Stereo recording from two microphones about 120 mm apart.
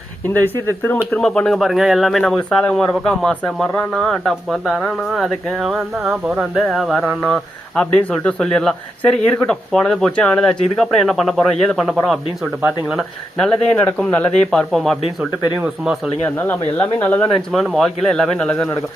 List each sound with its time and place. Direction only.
0.3 s speech: 15° left (ahead or behind)
1.1 s speech: 5° left (ahead or behind)
13.5 s speech: 10° left (ahead or behind)
15.6 s speech: 5° right (ahead or behind)
16.2 s speech: 15° left (ahead or behind)
17.3 s speech: centre (ahead or behind)